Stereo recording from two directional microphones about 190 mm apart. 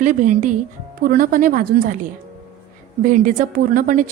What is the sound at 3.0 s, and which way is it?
A woman's voice, 40° right (ahead or behind).